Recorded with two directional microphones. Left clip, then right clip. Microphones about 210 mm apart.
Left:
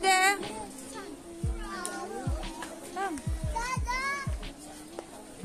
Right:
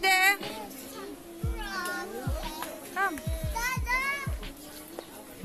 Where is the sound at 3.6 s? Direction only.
10° left (ahead or behind).